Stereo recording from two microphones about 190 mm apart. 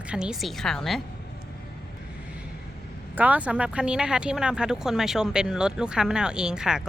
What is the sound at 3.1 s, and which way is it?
A woman's voice, 10° right (ahead or behind).